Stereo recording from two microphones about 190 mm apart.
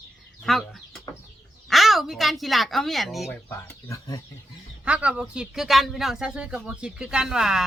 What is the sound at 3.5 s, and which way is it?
Speech, 15° left (ahead or behind).